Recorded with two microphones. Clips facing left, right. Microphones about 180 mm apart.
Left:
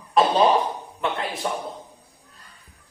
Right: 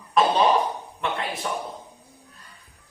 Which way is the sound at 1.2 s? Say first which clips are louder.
Left 1 dB; centre (ahead or behind).